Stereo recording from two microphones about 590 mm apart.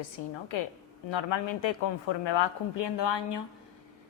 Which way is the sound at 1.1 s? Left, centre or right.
Left.